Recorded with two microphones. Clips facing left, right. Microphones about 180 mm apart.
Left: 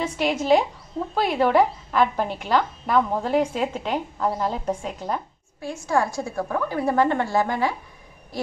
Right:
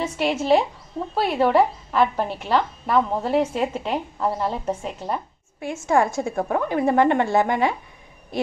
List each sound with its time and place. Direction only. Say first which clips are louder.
0.0 s a woman's voice: right 1 dB; 5° right (ahead or behind)
5.6 s a woman's voice: right 3 dB; 20° right (ahead or behind)